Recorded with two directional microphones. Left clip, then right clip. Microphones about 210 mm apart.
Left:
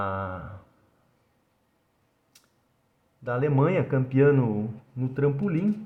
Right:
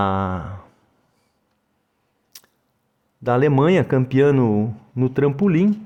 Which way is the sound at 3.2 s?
55° right (ahead or behind).